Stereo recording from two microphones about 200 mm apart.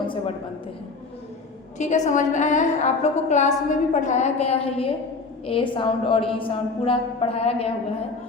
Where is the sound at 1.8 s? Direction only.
35° left (ahead or behind).